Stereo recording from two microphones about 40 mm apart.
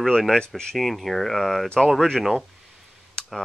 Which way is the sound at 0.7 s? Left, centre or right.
Centre.